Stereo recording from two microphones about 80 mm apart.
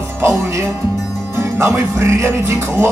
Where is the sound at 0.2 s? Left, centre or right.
Right.